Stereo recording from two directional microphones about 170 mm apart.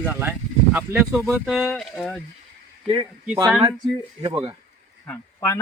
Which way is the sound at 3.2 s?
10° right (ahead or behind).